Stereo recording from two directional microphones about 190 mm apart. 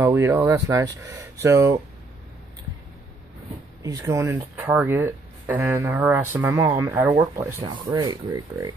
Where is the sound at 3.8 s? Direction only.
15° right (ahead or behind).